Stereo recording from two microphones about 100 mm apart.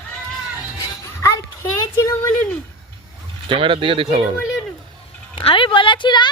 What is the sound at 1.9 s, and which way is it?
Speech, 30° left (ahead or behind).